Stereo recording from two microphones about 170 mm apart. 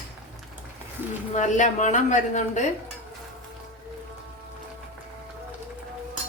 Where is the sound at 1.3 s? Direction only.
45° left (ahead or behind).